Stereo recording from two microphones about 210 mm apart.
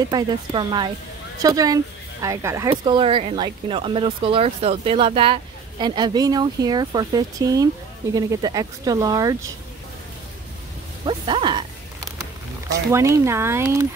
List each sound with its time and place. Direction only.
0.0 s speech: 20° right (ahead or behind)
11.1 s a sound: 20° right (ahead or behind)
12.9 s speech: 15° right (ahead or behind)